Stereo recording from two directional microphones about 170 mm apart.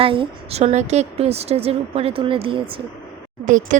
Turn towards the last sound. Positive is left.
turn(degrees=-50)  # may be behind; listen again after turning